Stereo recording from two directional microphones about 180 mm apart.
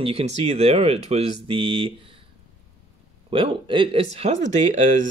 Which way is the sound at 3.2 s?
30° right (ahead or behind).